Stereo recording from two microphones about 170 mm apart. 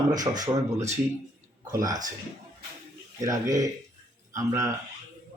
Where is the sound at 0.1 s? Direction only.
20° right (ahead or behind).